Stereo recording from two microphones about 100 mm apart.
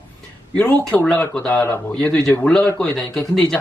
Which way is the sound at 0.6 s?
15° left (ahead or behind).